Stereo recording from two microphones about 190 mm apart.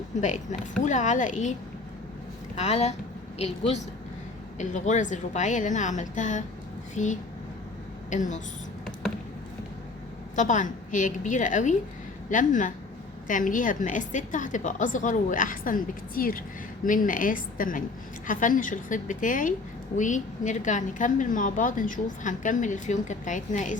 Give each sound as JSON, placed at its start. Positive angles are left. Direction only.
{"t": 0.2, "sound": "a woman's voice", "side_deg": 40}
{"t": 2.6, "sound": "a woman's voice", "side_deg": 35}
{"t": 4.5, "sound": "a woman's voice", "side_deg": 40}
{"t": 10.3, "sound": "a woman's voice", "side_deg": 40}